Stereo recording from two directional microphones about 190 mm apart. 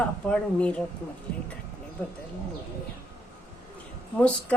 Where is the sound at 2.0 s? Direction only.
10° left (ahead or behind).